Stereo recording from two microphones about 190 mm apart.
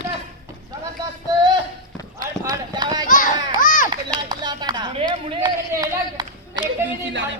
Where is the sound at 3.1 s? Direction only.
45° left (ahead or behind).